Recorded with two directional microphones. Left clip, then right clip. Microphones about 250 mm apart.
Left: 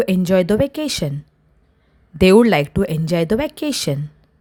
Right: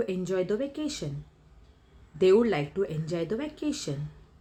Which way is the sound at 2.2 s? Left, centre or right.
Left.